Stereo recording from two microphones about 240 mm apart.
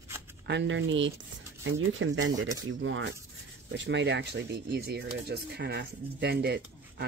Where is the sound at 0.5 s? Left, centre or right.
Right.